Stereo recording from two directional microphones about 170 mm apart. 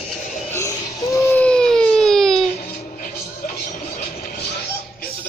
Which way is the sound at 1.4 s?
5° left (ahead or behind).